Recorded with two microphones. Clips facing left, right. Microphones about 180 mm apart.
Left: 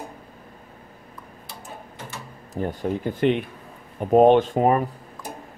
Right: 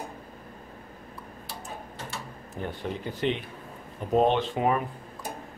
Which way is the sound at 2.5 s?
40° left (ahead or behind).